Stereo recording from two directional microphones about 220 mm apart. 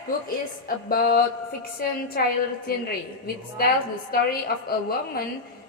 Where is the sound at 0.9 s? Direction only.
40° left (ahead or behind).